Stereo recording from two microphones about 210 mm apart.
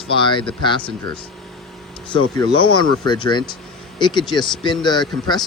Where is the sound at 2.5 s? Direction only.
20° left (ahead or behind).